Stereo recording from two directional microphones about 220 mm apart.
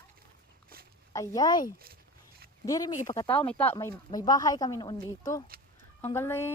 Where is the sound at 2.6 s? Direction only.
15° left (ahead or behind).